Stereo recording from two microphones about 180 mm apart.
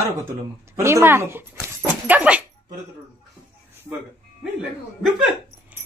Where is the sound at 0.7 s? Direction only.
15° right (ahead or behind).